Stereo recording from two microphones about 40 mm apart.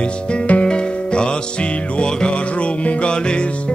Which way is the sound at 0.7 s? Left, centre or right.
Left.